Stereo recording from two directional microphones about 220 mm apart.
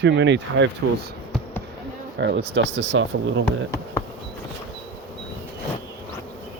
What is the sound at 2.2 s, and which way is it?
Speech, 55° right (ahead or behind).